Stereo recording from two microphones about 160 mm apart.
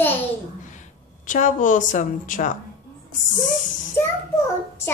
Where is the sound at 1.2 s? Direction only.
55° left (ahead or behind).